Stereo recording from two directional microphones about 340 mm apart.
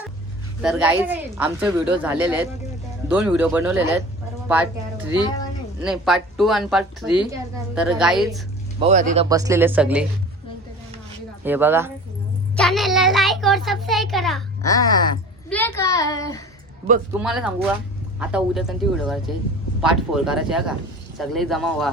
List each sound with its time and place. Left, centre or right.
0.6 s a child's voice: centre
8.8 s speech: right
9.3 s a child's voice: centre
11.4 s a child's voice: centre
17.1 s a child's voice: centre